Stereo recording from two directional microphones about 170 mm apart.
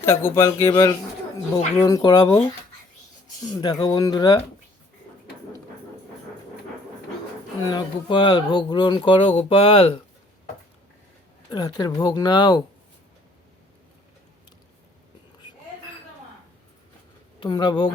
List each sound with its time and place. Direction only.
0.0 s speech: 15° left (ahead or behind)
3.4 s speech: 25° left (ahead or behind)
7.7 s speech: 25° left (ahead or behind)
11.5 s speech: 25° left (ahead or behind)
17.4 s speech: 25° left (ahead or behind)